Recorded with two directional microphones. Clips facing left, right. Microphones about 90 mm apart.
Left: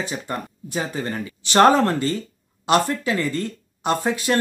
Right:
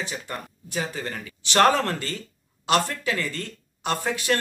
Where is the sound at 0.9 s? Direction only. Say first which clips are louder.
Left 6 dB; 30° left (ahead or behind).